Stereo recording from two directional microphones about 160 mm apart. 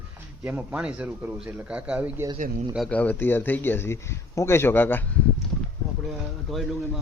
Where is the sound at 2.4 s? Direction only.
55° right (ahead or behind).